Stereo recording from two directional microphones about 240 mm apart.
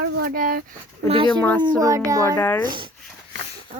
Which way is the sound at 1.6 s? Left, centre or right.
Centre.